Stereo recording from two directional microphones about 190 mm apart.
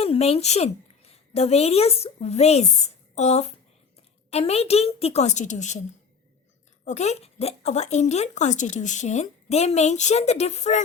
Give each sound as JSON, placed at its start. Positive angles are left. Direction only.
{"t": 0.0, "sound": "a woman's voice", "side_deg": 30}
{"t": 6.8, "sound": "speech", "side_deg": 35}